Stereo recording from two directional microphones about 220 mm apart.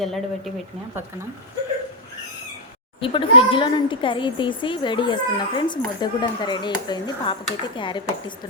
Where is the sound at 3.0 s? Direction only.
25° left (ahead or behind).